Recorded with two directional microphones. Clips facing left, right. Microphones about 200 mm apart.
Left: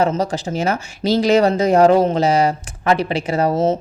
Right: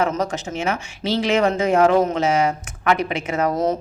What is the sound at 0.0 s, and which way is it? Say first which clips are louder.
A woman's voice: left 3 dB; 30° left (ahead or behind).